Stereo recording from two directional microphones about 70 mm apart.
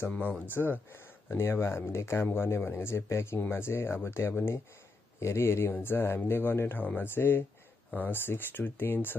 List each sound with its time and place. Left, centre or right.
0.6 s speech: left